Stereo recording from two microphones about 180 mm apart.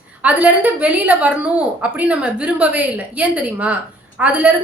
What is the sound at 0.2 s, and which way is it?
A woman's voice, 10° right (ahead or behind).